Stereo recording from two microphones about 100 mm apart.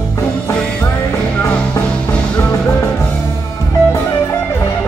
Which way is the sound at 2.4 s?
25° left (ahead or behind).